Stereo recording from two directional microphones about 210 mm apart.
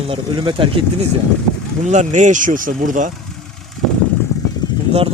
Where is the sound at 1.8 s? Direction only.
35° right (ahead or behind).